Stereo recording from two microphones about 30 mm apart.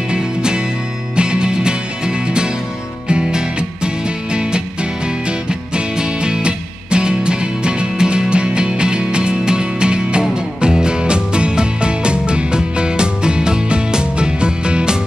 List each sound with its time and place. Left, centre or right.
0.1 s music: right